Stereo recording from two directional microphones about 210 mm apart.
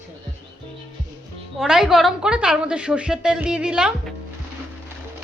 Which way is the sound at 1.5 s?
Centre (ahead or behind).